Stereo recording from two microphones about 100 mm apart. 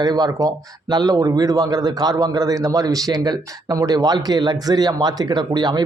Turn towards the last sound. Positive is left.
turn(degrees=-45)  # may be behind; listen again after turning